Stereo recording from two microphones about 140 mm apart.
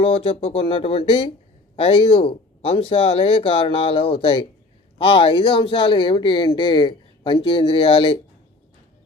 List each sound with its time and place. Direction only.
0.0 s speech: 40° left (ahead or behind)